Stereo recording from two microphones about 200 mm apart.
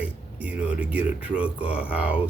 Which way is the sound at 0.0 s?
5° right (ahead or behind).